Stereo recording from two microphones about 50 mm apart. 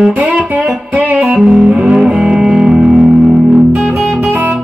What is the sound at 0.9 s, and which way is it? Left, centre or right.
Music, right.